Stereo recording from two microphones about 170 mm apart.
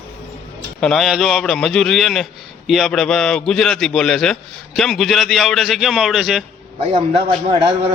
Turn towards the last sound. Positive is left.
turn(degrees=-35)  # may be behind; listen again after turning